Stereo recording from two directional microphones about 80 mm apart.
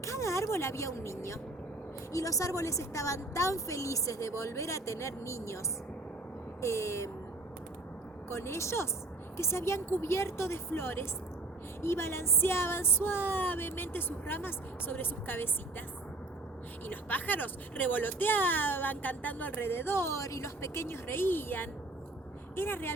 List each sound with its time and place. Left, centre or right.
0.0 s speech: left
6.6 s speech: left
8.3 s speech: left
16.8 s speech: left